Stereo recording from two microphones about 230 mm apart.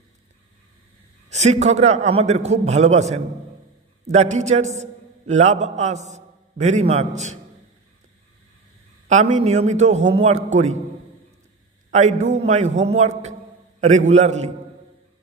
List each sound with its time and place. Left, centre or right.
1.3 s a man's voice: right
9.0 s a man's voice: right
11.9 s a man's voice: right